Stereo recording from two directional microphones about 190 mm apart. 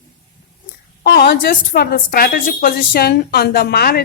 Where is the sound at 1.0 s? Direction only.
55° left (ahead or behind).